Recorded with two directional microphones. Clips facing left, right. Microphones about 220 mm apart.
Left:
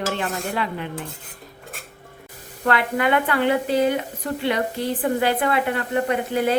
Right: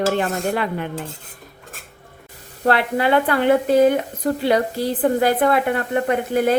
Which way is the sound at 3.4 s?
50° right (ahead or behind).